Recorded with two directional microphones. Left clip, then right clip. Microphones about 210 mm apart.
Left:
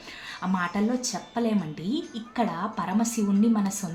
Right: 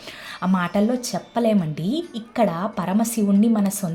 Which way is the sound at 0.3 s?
35° right (ahead or behind).